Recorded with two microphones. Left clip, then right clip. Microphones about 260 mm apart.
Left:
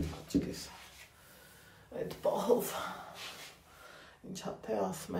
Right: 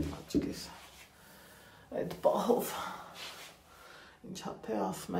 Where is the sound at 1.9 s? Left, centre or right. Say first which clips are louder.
Right 3 dB; right.